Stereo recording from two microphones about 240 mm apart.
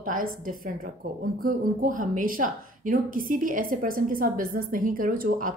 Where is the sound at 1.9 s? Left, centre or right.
Right.